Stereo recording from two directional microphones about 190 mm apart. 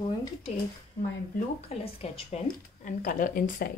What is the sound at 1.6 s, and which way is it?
Speech, 35° left (ahead or behind).